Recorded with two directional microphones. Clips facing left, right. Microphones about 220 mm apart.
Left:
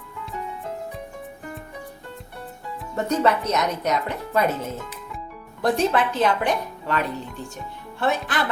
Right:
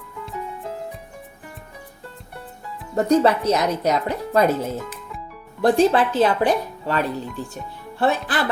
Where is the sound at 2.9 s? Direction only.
30° right (ahead or behind).